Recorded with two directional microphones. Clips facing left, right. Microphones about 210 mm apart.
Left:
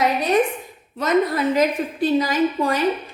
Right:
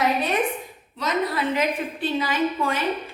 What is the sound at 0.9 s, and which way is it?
A woman's voice, 50° left (ahead or behind).